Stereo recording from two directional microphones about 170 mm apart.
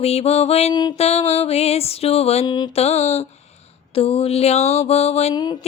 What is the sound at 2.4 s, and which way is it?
Mantra, 25° left (ahead or behind).